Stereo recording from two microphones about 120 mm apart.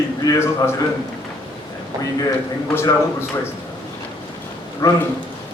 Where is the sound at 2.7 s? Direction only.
20° left (ahead or behind).